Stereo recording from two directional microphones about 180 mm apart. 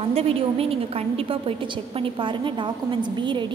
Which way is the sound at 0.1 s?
35° right (ahead or behind).